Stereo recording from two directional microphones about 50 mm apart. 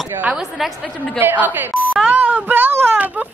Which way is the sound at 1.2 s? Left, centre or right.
Right.